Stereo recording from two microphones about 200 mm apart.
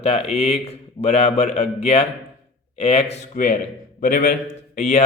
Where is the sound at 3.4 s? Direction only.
45° left (ahead or behind).